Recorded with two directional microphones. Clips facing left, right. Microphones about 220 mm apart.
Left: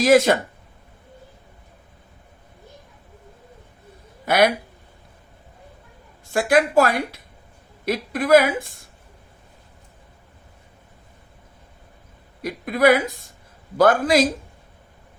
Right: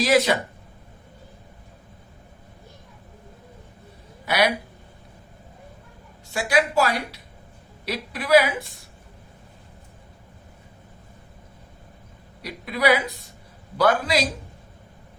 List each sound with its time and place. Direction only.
0.0 s a woman's voice: 50° left (ahead or behind)
4.3 s a woman's voice: 50° left (ahead or behind)
6.5 s a woman's voice: 50° left (ahead or behind)
12.4 s a woman's voice: 50° left (ahead or behind)